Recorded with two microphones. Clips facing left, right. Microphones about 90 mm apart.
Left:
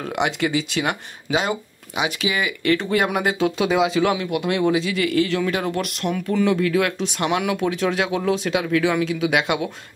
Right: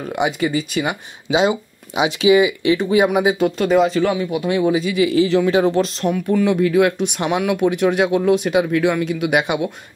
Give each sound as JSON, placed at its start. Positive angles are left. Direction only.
{"t": 0.0, "sound": "speech", "side_deg": -5}
{"t": 1.3, "sound": "speech", "side_deg": -20}
{"t": 2.4, "sound": "speech", "side_deg": -15}
{"t": 5.2, "sound": "speech", "side_deg": -20}
{"t": 6.3, "sound": "speech", "side_deg": -10}